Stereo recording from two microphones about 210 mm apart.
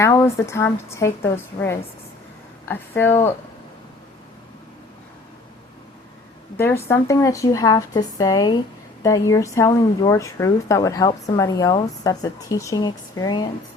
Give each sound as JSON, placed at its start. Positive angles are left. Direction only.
{"t": 0.0, "sound": "speech", "side_deg": 15}
{"t": 2.6, "sound": "speech", "side_deg": 10}
{"t": 6.6, "sound": "speech", "side_deg": 10}